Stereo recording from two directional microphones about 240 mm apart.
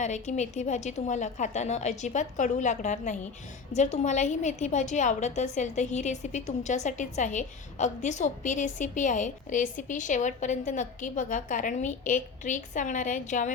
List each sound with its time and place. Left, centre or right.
0.0 s a woman's voice: left